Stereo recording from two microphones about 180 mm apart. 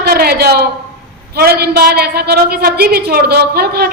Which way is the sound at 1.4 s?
60° right (ahead or behind).